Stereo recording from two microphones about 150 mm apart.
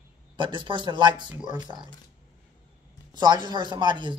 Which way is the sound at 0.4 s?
30° right (ahead or behind).